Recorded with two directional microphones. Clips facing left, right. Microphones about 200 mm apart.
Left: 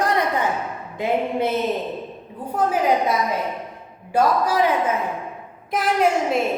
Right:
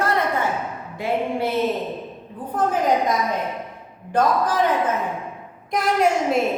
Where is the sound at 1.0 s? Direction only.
20° left (ahead or behind).